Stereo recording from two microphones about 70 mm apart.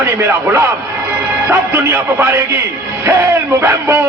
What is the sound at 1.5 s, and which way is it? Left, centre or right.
Speech, right.